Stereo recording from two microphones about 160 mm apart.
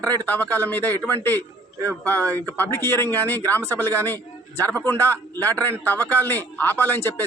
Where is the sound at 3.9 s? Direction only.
10° left (ahead or behind).